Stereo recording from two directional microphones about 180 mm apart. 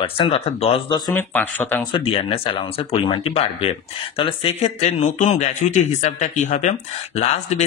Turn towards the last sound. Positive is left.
turn(degrees=40)  # may be behind; listen again after turning